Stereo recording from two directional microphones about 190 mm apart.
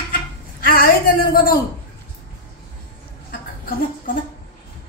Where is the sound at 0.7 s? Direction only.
50° left (ahead or behind).